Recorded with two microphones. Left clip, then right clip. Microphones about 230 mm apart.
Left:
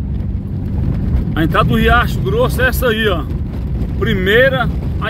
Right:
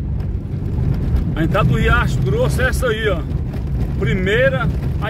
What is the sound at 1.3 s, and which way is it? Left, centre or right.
Speech, left.